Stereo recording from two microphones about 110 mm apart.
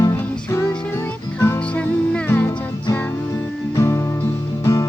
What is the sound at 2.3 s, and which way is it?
Music, 25° left (ahead or behind).